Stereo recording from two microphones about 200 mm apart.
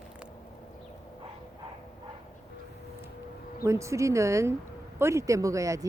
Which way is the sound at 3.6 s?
15° right (ahead or behind).